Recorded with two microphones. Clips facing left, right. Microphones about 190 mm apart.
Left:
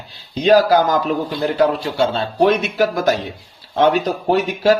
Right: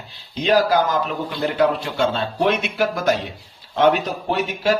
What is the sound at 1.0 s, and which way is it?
Speech, 35° left (ahead or behind).